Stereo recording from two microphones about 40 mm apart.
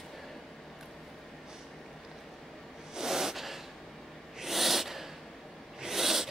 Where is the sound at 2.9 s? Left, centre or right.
Centre.